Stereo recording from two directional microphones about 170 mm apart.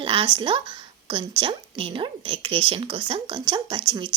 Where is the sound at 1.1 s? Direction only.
30° right (ahead or behind).